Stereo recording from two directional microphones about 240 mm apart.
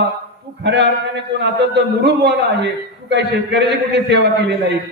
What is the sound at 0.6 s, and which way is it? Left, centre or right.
A man's voice, right.